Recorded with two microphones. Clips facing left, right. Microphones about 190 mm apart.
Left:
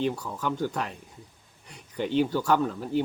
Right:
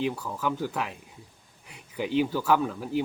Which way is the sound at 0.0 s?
5° right (ahead or behind).